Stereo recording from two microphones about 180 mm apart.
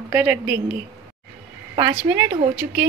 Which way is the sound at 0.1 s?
10° right (ahead or behind).